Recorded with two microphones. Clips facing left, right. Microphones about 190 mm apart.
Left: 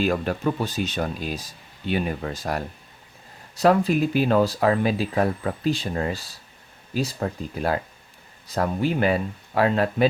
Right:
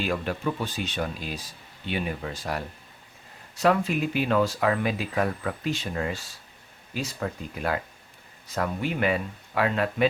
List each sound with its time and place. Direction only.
0.0 s speech: 45° left (ahead or behind)